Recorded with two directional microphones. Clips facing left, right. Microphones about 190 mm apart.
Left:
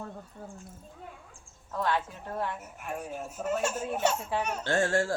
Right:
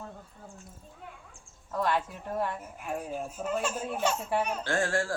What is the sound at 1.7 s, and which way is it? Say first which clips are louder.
Speech: right 1 dB; 10° right (ahead or behind).